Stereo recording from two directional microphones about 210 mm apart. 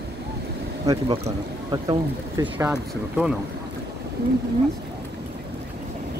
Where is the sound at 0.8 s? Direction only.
25° right (ahead or behind).